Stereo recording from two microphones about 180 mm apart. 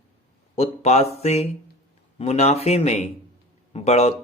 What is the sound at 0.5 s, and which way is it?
Speech, 35° left (ahead or behind).